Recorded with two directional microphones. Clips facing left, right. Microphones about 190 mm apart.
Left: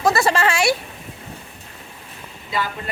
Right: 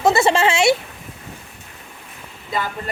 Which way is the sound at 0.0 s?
25° right (ahead or behind).